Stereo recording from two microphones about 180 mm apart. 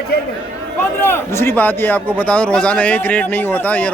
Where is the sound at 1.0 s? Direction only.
15° left (ahead or behind).